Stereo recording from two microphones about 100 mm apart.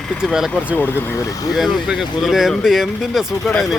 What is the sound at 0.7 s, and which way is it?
Speech, 20° left (ahead or behind).